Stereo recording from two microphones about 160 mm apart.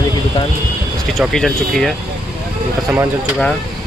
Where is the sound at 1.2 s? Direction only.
5° left (ahead or behind).